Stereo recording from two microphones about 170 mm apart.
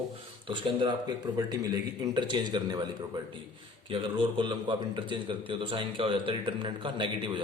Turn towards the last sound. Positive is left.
turn(degrees=-30)  # may be behind; listen again after turning